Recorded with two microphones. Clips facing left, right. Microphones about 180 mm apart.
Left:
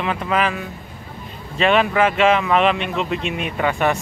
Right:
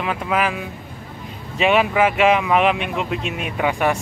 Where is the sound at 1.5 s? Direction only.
10° right (ahead or behind).